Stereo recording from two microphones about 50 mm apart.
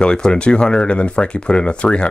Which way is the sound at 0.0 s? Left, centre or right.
Centre.